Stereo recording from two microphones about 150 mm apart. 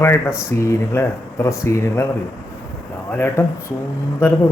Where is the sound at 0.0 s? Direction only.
15° left (ahead or behind).